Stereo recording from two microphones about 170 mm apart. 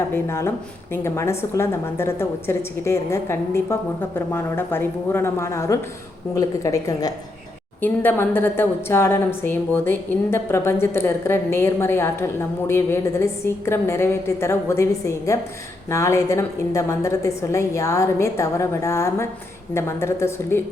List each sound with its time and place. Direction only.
0.1 s a woman's voice: 15° left (ahead or behind)